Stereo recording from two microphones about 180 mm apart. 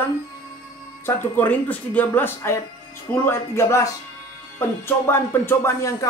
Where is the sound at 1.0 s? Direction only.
10° left (ahead or behind).